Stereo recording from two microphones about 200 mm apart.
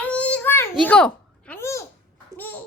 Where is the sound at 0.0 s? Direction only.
5° left (ahead or behind).